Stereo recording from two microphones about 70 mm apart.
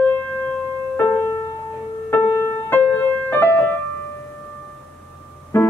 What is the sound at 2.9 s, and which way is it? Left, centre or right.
Music, left.